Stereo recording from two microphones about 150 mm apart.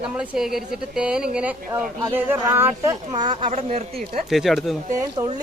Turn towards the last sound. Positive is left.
turn(degrees=-25)  # may be behind; listen again after turning